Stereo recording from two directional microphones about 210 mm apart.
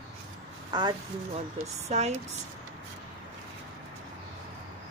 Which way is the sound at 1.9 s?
30° right (ahead or behind).